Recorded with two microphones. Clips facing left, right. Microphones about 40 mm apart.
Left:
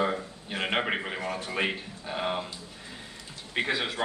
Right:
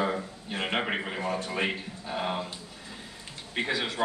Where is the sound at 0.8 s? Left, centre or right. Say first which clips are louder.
Even; centre.